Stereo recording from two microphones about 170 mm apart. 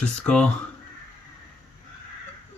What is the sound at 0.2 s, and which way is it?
Speech, 5° left (ahead or behind).